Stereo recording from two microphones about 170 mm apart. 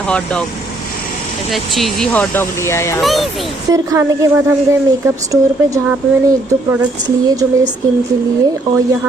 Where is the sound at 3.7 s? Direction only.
20° right (ahead or behind).